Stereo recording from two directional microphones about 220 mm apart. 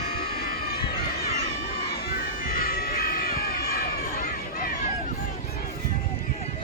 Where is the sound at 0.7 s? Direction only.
45° left (ahead or behind).